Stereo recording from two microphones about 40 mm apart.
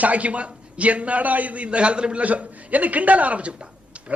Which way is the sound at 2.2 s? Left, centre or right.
Right.